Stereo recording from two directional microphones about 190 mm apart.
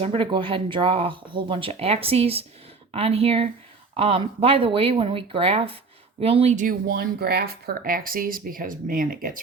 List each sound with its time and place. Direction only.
0.0 s speech: 30° right (ahead or behind); by 9.4 s 45° right (ahead or behind)